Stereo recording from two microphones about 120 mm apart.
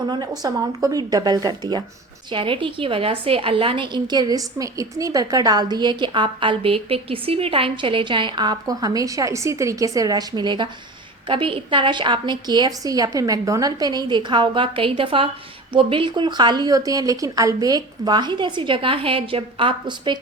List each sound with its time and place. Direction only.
0.1 s a woman's voice: 30° right (ahead or behind)
2.3 s a woman's voice: 45° right (ahead or behind)